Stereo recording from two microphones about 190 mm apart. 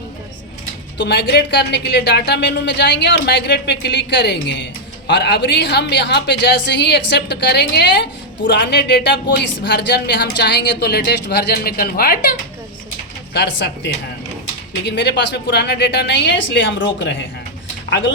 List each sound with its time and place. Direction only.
0.9 s a woman's voice: 60° left (ahead or behind)
13.3 s a woman's voice: 70° left (ahead or behind)